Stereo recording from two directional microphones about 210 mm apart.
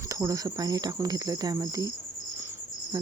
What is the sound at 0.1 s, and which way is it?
Speech, 15° right (ahead or behind).